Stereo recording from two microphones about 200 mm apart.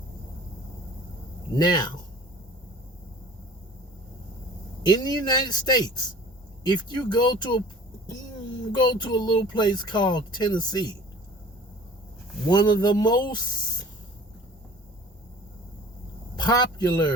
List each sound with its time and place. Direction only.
1.5 s speech: 20° left (ahead or behind)
4.9 s speech: 20° left (ahead or behind)
8.7 s speech: 20° left (ahead or behind)
12.5 s speech: 20° left (ahead or behind)
16.4 s speech: 20° left (ahead or behind)